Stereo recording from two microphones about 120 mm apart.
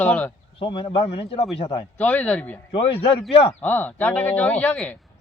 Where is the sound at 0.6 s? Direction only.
45° left (ahead or behind).